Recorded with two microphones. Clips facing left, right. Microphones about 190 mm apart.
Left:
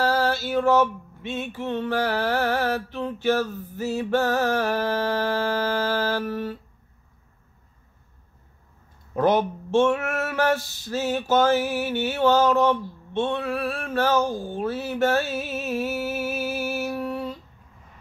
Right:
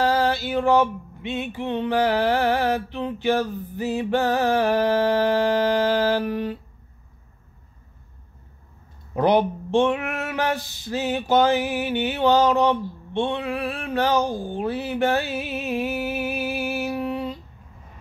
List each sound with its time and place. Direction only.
0.0 s male singing: 15° right (ahead or behind)
9.1 s male singing: 15° right (ahead or behind)